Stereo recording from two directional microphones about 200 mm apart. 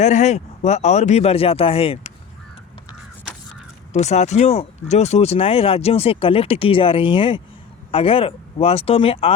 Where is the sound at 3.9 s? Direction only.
35° left (ahead or behind).